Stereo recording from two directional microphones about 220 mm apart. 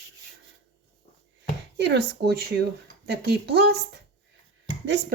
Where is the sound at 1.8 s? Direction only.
50° right (ahead or behind).